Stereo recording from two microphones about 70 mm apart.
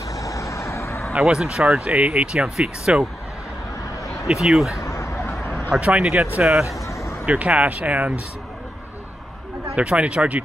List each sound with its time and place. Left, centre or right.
0.1 s vehicle: left
1.1 s speech: centre
4.3 s speech: centre
4.8 s a sound: left
5.7 s speech: centre
7.2 s speech: centre
9.8 s speech: centre